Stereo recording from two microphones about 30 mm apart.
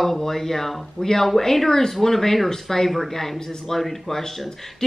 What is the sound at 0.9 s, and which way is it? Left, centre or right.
Speech, centre.